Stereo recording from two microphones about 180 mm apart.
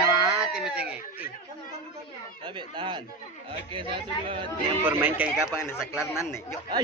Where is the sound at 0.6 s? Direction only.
5° right (ahead or behind).